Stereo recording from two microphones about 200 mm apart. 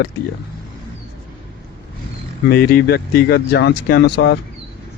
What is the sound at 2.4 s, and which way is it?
Speech, 50° left (ahead or behind).